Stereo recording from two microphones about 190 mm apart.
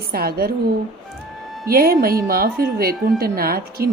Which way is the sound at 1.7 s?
50° right (ahead or behind).